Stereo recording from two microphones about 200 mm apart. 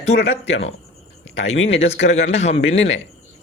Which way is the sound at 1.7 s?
30° left (ahead or behind).